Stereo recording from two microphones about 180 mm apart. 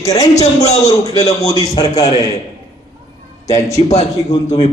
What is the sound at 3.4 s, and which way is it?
Speech, 15° left (ahead or behind).